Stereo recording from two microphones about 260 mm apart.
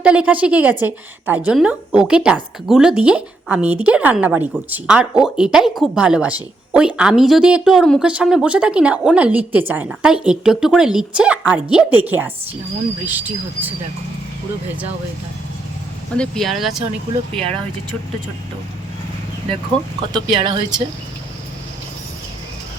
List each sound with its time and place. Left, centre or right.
0.0 s speech: centre
16.1 s speech: centre
20.1 s speech: centre